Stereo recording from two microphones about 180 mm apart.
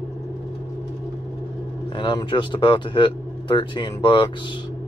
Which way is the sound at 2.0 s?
25° left (ahead or behind).